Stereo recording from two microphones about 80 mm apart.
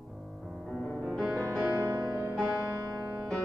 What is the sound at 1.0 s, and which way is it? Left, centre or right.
Music, centre.